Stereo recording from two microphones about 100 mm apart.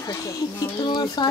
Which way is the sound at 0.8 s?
50° left (ahead or behind).